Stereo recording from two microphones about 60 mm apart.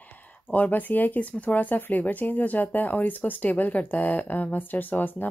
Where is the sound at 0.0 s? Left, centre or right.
Left.